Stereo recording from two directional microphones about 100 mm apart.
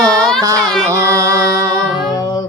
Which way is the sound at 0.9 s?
30° right (ahead or behind).